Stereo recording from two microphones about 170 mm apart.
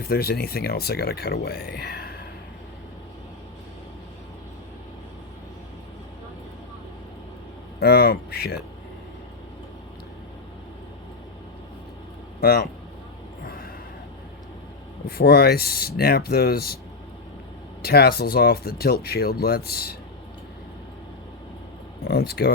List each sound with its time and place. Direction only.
0.1 s speech: 65° left (ahead or behind)
7.8 s speech: 65° left (ahead or behind)
12.4 s speech: 65° left (ahead or behind)
15.1 s speech: 65° left (ahead or behind)
17.8 s speech: 70° left (ahead or behind)
22.0 s speech: 70° left (ahead or behind)